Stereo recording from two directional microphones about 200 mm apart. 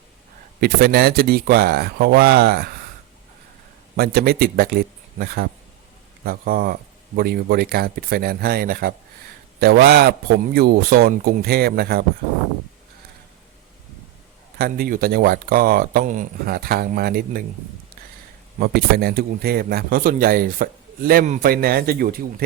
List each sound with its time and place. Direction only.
0.6 s speech: 50° right (ahead or behind)
3.9 s speech: 50° right (ahead or behind)
14.6 s speech: 45° right (ahead or behind)
18.6 s speech: 50° right (ahead or behind)